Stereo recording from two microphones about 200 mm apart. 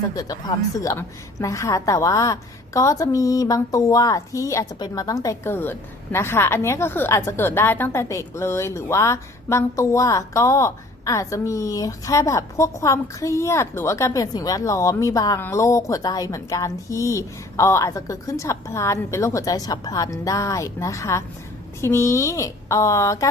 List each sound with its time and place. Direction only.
0.2 s a woman's voice: 20° left (ahead or behind)